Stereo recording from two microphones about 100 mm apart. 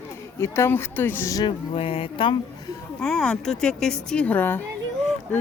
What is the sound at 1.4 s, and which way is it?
Speech, 65° left (ahead or behind).